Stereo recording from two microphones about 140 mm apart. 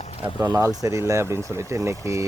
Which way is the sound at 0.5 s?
25° right (ahead or behind).